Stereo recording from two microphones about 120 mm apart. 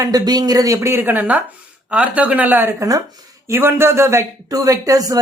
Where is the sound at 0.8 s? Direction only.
20° right (ahead or behind).